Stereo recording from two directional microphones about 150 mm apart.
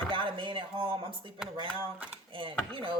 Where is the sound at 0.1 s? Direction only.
35° right (ahead or behind).